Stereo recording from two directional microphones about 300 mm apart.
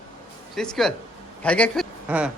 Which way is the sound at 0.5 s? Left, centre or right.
Centre.